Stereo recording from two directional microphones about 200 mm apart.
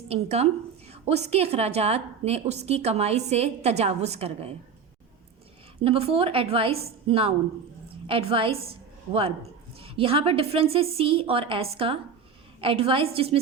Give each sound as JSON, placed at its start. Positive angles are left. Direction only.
{"t": 0.1, "sound": "a woman's voice", "side_deg": -30}
{"t": 5.8, "sound": "a woman's voice", "side_deg": -30}